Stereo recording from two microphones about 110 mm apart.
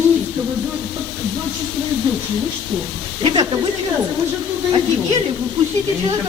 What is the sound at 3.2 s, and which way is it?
Speech, 50° right (ahead or behind).